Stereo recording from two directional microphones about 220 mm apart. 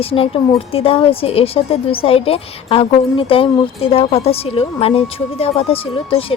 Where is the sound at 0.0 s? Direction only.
25° left (ahead or behind).